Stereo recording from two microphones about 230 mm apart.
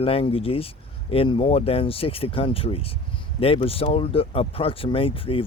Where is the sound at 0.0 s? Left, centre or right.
Left.